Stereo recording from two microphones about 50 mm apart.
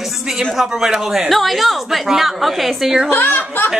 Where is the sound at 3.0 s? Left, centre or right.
Left.